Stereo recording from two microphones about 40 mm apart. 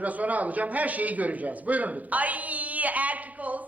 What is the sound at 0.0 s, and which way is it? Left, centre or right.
A man's voice, right.